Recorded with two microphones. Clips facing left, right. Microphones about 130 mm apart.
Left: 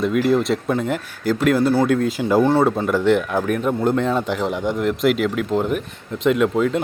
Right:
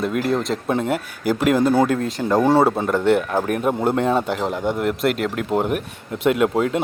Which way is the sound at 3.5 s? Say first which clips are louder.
Even; 45° right (ahead or behind).